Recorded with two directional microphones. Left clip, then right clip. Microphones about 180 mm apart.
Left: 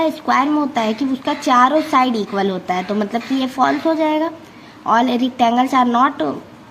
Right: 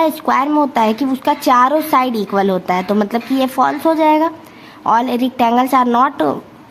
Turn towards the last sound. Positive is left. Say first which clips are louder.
# right 2 dB
turn(degrees=-30)  # may be behind; listen again after turning